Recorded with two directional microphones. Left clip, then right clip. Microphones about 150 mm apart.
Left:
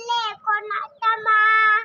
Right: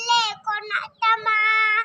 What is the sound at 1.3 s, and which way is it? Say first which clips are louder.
Child singing: left 7 dB; 35° right (ahead or behind).